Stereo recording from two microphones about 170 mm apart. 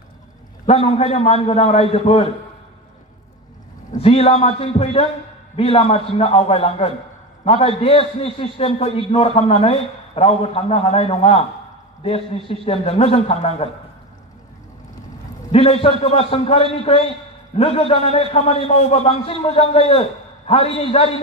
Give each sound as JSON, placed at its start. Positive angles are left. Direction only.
{"t": 0.7, "sound": "a man's voice", "side_deg": 40}
{"t": 4.0, "sound": "a man's voice", "side_deg": 35}
{"t": 15.5, "sound": "a man's voice", "side_deg": 35}